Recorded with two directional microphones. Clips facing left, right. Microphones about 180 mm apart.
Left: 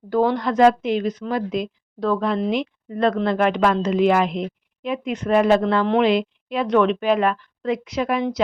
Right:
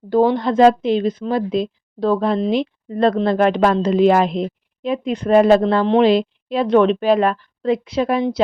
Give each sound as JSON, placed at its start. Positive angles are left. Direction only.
{"t": 0.1, "sound": "speech", "side_deg": -25}